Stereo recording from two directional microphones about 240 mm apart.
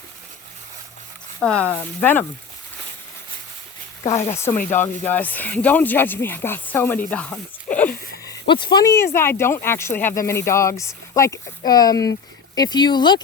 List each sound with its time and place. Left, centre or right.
1.4 s speech: centre
4.5 s speech: centre
8.2 s speech: centre